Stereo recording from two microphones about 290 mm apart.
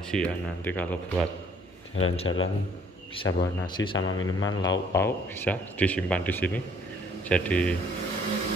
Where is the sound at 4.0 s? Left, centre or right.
Left.